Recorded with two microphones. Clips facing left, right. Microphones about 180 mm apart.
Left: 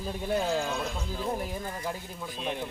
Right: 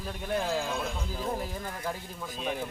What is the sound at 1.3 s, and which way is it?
Speech, 10° left (ahead or behind).